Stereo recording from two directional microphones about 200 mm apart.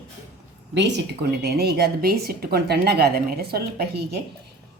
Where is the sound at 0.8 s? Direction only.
60° right (ahead or behind).